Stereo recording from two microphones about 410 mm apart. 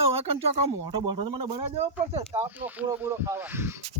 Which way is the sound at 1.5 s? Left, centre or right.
Centre.